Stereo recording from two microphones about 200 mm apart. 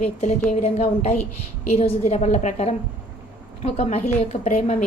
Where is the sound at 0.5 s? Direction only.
35° left (ahead or behind).